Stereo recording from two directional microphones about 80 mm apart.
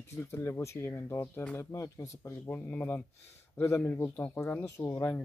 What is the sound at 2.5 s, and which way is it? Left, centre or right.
Speech, left.